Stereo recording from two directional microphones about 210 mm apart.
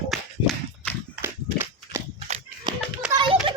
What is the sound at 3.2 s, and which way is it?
Children playing, 25° right (ahead or behind).